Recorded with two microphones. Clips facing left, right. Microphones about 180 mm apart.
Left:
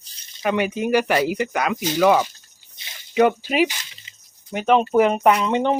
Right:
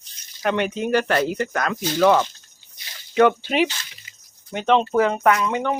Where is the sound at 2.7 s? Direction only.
20° left (ahead or behind).